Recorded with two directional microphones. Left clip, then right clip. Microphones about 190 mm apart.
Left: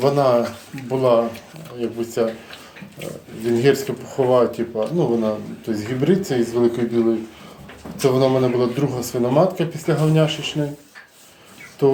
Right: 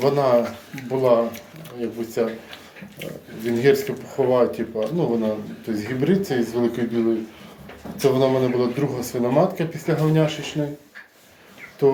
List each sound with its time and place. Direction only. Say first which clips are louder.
0.0 s speech: left 2 dB; 10° left (ahead or behind)
11.8 s speech: left 1 dB; 10° left (ahead or behind)